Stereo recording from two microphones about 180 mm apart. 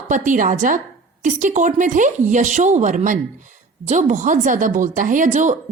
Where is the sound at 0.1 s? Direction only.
45° right (ahead or behind).